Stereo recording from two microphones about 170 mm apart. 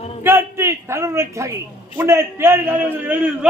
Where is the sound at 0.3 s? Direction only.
15° right (ahead or behind).